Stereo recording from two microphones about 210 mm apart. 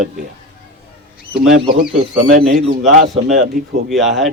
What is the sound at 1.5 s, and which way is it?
Speech, 35° right (ahead or behind).